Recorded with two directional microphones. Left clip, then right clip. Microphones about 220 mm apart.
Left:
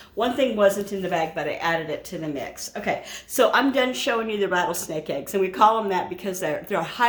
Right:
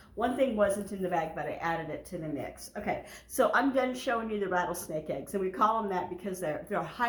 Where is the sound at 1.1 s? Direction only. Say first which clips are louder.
Left 8 dB; 40° left (ahead or behind).